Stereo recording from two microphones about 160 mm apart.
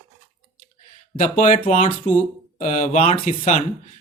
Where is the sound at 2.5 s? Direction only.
45° left (ahead or behind).